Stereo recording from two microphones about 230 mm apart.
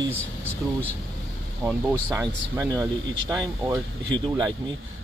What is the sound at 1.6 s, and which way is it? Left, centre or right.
Speech, centre.